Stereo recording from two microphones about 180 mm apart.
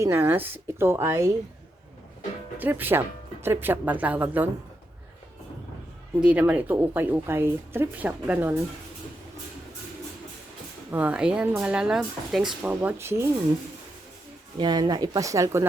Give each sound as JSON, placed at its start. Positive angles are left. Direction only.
{"t": 0.0, "sound": "speech", "side_deg": -10}
{"t": 2.6, "sound": "speech", "side_deg": -10}
{"t": 6.1, "sound": "speech", "side_deg": -5}
{"t": 10.9, "sound": "speech", "side_deg": -5}
{"t": 14.6, "sound": "speech", "side_deg": -20}